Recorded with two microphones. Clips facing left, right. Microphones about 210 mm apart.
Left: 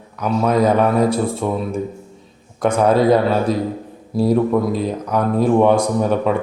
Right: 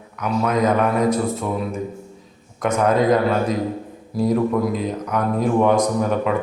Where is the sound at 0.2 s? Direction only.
30° left (ahead or behind).